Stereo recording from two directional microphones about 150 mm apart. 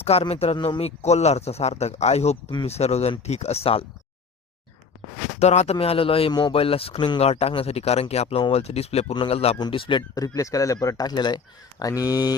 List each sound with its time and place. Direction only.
0.0 s speech: 40° left (ahead or behind)
0.5 s speech: 30° left (ahead or behind)
0.8 s speech: 45° left (ahead or behind)
5.4 s speech: 45° left (ahead or behind)
10.2 s speech: 20° left (ahead or behind)